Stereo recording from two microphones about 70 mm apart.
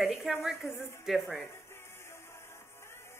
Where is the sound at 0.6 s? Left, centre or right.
Left.